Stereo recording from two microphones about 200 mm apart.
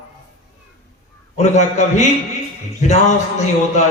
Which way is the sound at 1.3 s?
35° left (ahead or behind).